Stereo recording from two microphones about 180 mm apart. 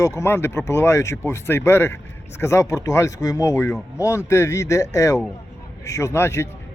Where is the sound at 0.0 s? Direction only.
15° left (ahead or behind).